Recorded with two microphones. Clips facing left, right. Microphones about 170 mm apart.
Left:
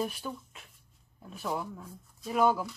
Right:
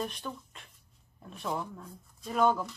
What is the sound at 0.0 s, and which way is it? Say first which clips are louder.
Speech: left 2 dB; 5° left (ahead or behind).